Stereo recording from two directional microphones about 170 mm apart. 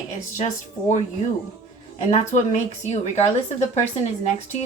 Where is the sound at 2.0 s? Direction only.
45° left (ahead or behind).